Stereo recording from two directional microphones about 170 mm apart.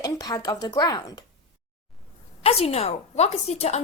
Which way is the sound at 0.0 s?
20° left (ahead or behind).